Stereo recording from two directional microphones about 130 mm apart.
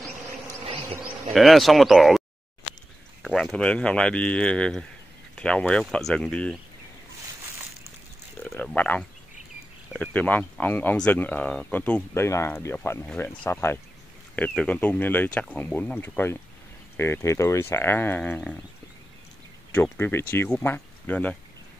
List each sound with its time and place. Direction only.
1.3 s speech: centre (ahead or behind)
8.5 s speech: 15° left (ahead or behind)
13.0 s speech: 10° left (ahead or behind)
13.5 s speech: 20° left (ahead or behind)
19.7 s speech: 15° left (ahead or behind)